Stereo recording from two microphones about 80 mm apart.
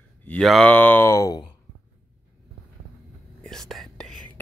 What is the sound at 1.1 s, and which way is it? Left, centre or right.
Speech, left.